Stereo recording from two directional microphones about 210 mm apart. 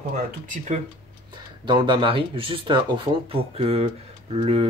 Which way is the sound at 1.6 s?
20° right (ahead or behind).